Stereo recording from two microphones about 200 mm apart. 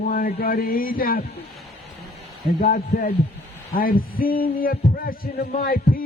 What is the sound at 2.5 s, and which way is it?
Speech, 45° left (ahead or behind).